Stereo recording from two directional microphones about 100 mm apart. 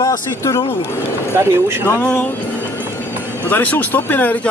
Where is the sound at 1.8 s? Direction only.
15° left (ahead or behind).